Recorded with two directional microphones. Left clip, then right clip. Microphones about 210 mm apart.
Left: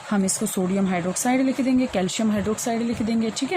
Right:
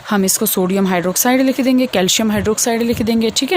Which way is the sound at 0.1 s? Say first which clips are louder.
Right 9 dB; 50° right (ahead or behind).